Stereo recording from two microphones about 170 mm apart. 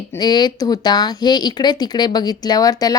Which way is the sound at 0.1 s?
25° left (ahead or behind).